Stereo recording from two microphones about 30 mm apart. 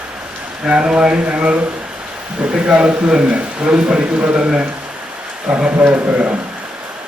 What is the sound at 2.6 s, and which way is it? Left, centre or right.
A man's voice, right.